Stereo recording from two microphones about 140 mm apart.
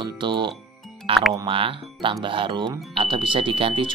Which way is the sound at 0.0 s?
35° right (ahead or behind).